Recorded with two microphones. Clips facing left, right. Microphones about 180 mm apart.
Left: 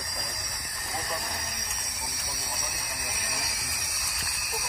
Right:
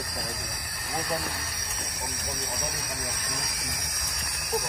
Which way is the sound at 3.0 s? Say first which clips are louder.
Right 2 dB; 10° left (ahead or behind).